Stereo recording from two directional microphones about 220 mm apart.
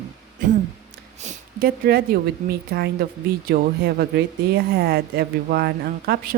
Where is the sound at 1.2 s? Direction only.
45° right (ahead or behind).